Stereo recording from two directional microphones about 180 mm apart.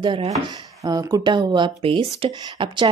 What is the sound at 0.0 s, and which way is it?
Speech, 25° right (ahead or behind).